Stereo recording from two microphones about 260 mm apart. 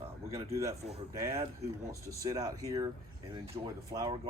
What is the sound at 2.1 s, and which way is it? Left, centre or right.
Speech, centre.